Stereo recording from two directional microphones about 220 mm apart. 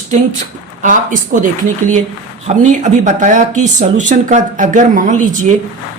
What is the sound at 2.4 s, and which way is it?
Speech, 35° right (ahead or behind).